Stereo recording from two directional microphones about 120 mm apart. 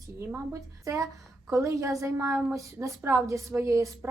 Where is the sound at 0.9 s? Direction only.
25° right (ahead or behind).